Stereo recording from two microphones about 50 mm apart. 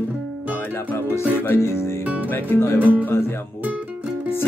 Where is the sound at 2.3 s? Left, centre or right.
Left.